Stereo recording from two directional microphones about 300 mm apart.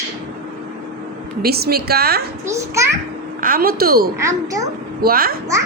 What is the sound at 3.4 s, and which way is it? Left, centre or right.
A woman's voice, right.